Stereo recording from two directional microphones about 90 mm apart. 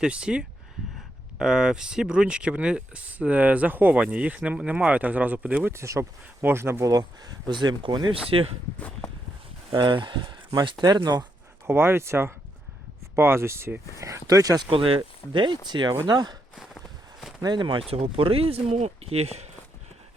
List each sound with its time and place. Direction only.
0.0 s speech: 10° right (ahead or behind)
5.7 s speech: 30° right (ahead or behind)
6.9 s speech: 50° right (ahead or behind)
8.3 s speech: 90° right
9.7 s speech: 65° right (ahead or behind)
11.6 s speech: 25° right (ahead or behind)
14.0 s speech: 35° right (ahead or behind)
14.7 s speech: 85° right; by 16.4 s 50° right (ahead or behind)
16.6 s walk: centre (ahead or behind)
17.4 s speech: 60° right (ahead or behind)
17.9 s speech: 90° right